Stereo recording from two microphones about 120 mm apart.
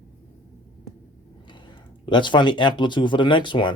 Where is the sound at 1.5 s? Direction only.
40° left (ahead or behind).